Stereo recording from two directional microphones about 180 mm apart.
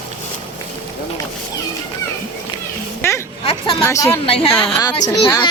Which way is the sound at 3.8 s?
15° left (ahead or behind).